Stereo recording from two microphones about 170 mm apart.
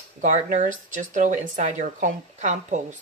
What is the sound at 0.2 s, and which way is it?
Speech, 45° right (ahead or behind).